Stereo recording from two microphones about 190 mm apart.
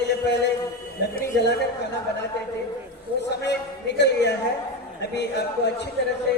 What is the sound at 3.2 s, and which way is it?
A man's voice, 65° left (ahead or behind).